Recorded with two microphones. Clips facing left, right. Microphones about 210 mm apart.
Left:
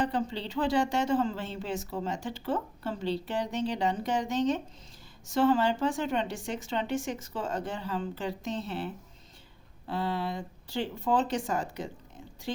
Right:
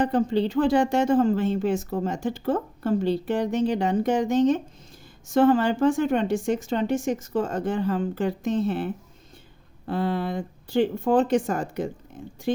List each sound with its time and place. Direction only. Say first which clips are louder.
0.0 s speech: right 9 dB; 50° right (ahead or behind)